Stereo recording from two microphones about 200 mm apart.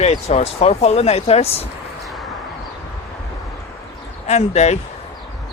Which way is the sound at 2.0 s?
Centre (ahead or behind).